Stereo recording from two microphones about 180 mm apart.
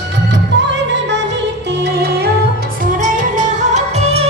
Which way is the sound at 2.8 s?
45° right (ahead or behind).